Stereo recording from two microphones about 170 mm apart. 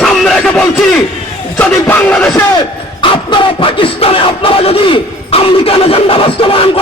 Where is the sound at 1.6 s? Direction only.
10° left (ahead or behind).